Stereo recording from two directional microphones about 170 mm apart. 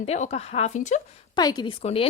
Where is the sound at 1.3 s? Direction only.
25° left (ahead or behind).